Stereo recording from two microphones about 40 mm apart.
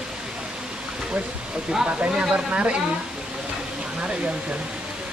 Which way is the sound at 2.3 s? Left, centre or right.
Right.